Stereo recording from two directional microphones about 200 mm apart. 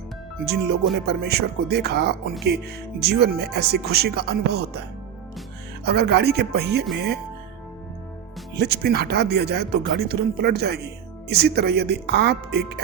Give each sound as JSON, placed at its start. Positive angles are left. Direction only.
{"t": 0.4, "sound": "speech", "side_deg": -55}
{"t": 5.8, "sound": "speech", "side_deg": -55}
{"t": 8.5, "sound": "speech", "side_deg": -55}